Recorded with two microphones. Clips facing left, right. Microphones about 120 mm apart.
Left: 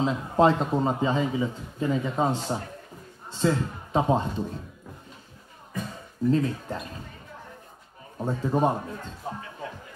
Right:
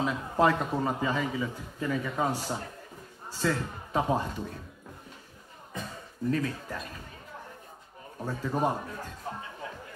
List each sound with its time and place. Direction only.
0.0 s a man's voice: 25° left (ahead or behind)
6.3 s a man's voice: 25° left (ahead or behind)
8.2 s a man's voice: 25° left (ahead or behind)